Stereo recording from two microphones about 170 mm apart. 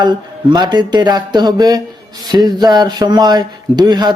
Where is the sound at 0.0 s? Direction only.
25° right (ahead or behind).